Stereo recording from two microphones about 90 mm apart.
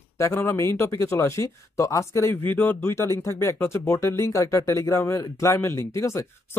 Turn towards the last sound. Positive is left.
turn(degrees=35)  # may be behind; listen again after turning